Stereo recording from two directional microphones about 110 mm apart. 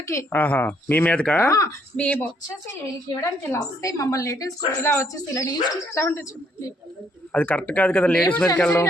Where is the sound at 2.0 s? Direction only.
15° left (ahead or behind).